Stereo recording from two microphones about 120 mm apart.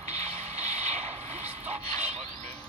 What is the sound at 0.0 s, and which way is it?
Music, 70° right (ahead or behind).